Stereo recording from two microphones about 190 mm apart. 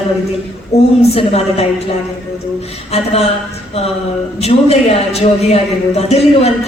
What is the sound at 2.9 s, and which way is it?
Speech, 35° left (ahead or behind).